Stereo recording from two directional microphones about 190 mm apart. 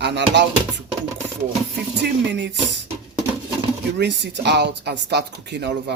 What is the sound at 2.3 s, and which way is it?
Speech, 65° right (ahead or behind).